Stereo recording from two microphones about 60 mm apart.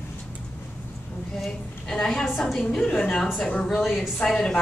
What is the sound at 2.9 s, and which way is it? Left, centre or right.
Speech, left.